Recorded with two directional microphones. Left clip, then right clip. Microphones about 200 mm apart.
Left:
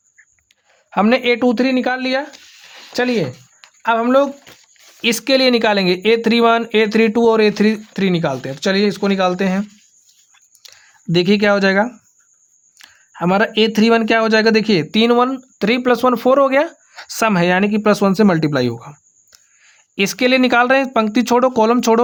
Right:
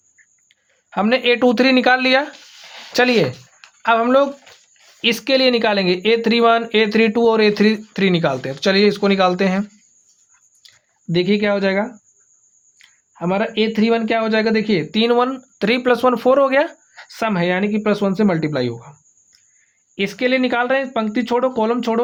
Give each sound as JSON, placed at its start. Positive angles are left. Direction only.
{"t": 0.9, "sound": "a man's voice", "side_deg": 35}
{"t": 1.4, "sound": "speech", "side_deg": 10}
{"t": 3.8, "sound": "speech", "side_deg": 20}
{"t": 10.6, "sound": "speech", "side_deg": 40}